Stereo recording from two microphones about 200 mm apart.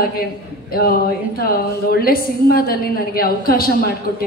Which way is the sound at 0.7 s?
50° left (ahead or behind).